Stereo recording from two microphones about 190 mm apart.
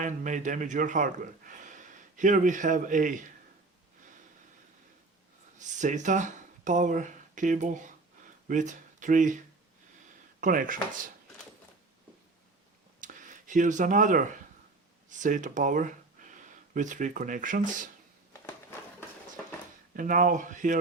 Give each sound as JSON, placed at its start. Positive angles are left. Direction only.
{"t": 0.0, "sound": "a man's voice", "side_deg": -40}
{"t": 5.5, "sound": "speech", "side_deg": -40}
{"t": 10.4, "sound": "a man's voice", "side_deg": -45}
{"t": 13.0, "sound": "a sound", "side_deg": -45}
{"t": 15.2, "sound": "speech", "side_deg": -40}
{"t": 20.0, "sound": "a man's voice", "side_deg": -45}